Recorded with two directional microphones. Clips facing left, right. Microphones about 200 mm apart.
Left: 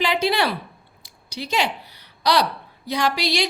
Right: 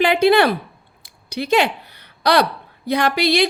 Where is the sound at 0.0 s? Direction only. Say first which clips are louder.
Right 7 dB; 55° right (ahead or behind).